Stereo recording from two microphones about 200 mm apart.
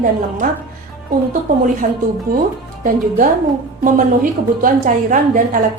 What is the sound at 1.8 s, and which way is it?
Speech, 50° right (ahead or behind).